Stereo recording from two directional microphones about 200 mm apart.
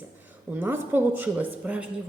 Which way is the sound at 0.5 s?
10° right (ahead or behind).